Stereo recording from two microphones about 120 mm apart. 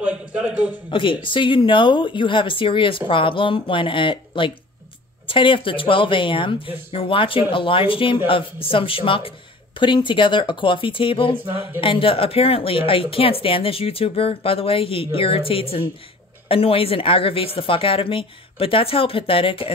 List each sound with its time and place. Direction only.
0.0 s a man's voice: 10° right (ahead or behind)
0.8 s speech: 45° left (ahead or behind)